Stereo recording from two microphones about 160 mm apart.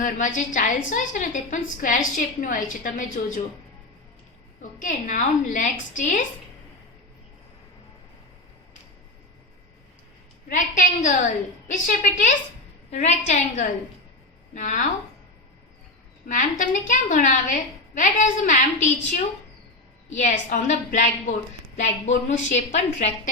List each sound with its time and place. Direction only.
0.0 s a woman's voice: 55° left (ahead or behind)
4.8 s a woman's voice: 55° left (ahead or behind)
10.5 s a woman's voice: 50° left (ahead or behind)
16.3 s a woman's voice: 55° left (ahead or behind)
20.1 s a woman's voice: 50° left (ahead or behind)